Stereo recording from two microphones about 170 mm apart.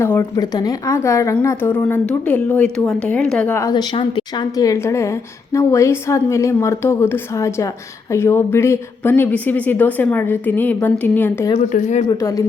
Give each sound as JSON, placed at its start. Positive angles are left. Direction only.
{"t": 0.0, "sound": "a woman's voice", "side_deg": 15}
{"t": 3.7, "sound": "a woman's voice", "side_deg": 25}
{"t": 11.7, "sound": "speech", "side_deg": 45}
{"t": 12.0, "sound": "speech", "side_deg": 20}